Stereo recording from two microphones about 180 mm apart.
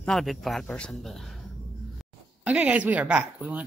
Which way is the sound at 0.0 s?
Centre (ahead or behind).